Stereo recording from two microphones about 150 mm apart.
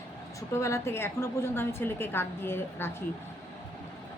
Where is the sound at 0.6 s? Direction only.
20° left (ahead or behind).